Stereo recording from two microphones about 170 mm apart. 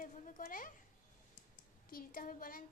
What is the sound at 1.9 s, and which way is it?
Speech, 55° left (ahead or behind).